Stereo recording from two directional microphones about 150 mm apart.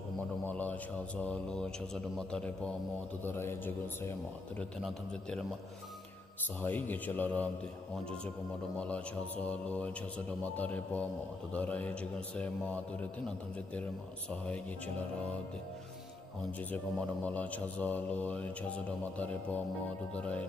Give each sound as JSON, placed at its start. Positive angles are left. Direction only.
{"t": 0.5, "sound": "a man's voice", "side_deg": 10}
{"t": 4.6, "sound": "a man's voice", "side_deg": 5}
{"t": 6.6, "sound": "a man's voice", "side_deg": 10}
{"t": 8.7, "sound": "a man's voice", "side_deg": 10}
{"t": 16.7, "sound": "a man's voice", "side_deg": 10}